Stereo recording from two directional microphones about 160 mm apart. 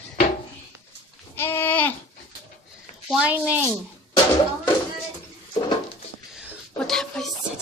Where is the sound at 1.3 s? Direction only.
15° left (ahead or behind).